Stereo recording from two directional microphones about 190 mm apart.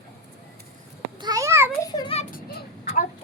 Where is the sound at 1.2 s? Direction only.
20° right (ahead or behind).